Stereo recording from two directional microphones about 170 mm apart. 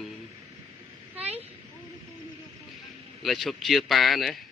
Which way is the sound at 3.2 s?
Centre (ahead or behind).